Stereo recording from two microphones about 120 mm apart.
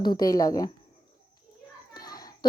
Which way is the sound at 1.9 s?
35° left (ahead or behind).